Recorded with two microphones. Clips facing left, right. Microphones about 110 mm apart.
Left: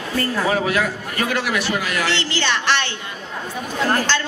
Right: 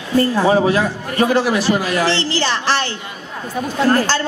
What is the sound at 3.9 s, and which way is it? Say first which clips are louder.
Speech: right 4 dB; 35° right (ahead or behind).